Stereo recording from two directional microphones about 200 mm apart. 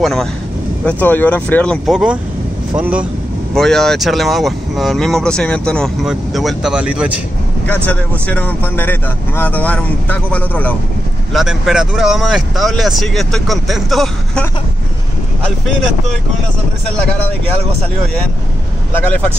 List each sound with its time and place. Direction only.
0.0 s a man's voice: centre (ahead or behind)
7.6 s a man's voice: 5° left (ahead or behind)